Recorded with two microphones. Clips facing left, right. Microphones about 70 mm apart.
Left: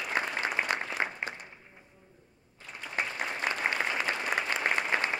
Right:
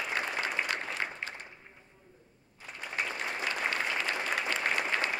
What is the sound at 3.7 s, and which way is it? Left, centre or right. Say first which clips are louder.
Applause: left 2 dB; centre.